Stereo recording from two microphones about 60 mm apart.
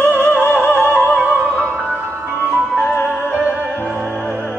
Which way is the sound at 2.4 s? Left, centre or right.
Right.